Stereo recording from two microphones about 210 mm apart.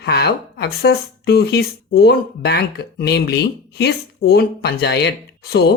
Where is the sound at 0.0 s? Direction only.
50° left (ahead or behind).